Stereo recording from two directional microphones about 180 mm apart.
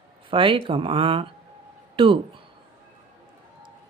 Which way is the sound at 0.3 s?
30° right (ahead or behind).